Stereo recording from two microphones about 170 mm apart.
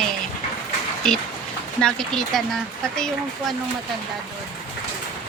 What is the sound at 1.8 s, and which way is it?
Speech, centre (ahead or behind).